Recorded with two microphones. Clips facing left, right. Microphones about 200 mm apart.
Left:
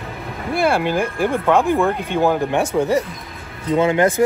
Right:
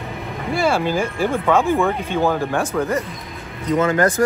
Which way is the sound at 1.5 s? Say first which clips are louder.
Left 1 dB; 15° left (ahead or behind).